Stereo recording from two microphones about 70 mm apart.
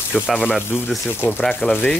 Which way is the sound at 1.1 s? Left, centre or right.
Left.